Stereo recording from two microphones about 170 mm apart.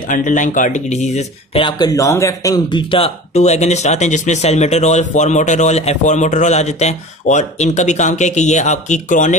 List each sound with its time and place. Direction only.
0.1 s speech: 50° left (ahead or behind)
1.6 s speech: 25° left (ahead or behind); by 9.4 s 45° left (ahead or behind)